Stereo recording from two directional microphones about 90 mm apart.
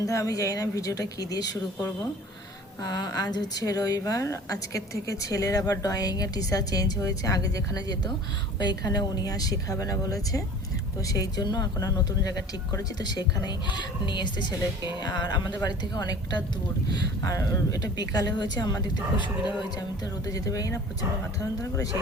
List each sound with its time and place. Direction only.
0.0 s a woman's voice: 40° left (ahead or behind)